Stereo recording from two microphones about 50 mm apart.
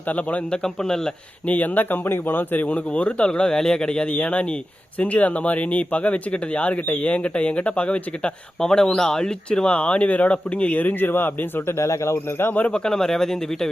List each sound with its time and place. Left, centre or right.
0.1 s speech: left
0.5 s speech: centre
1.5 s speech: left
2.6 s speech: left
4.1 s speech: left
8.6 s speech: centre; by 11.6 s left
11.8 s speech: left
12.1 s speech: left
12.6 s speech: left
12.9 s speech: centre